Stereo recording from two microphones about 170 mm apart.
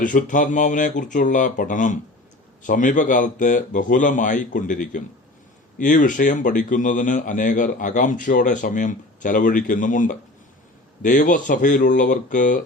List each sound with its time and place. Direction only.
0.0 s speech: 50° left (ahead or behind)